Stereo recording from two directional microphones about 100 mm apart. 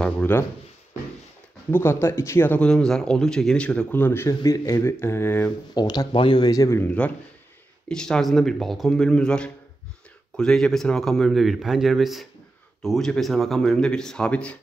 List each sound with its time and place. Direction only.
0.0 s speech: 20° left (ahead or behind)
1.7 s speech: 25° left (ahead or behind)
2.6 s a man's voice: 5° left (ahead or behind); by 4.3 s 20° left (ahead or behind)
4.3 s speech: 40° left (ahead or behind)
5.4 s speech: 45° left (ahead or behind)
6.8 s a man's voice: 15° left (ahead or behind)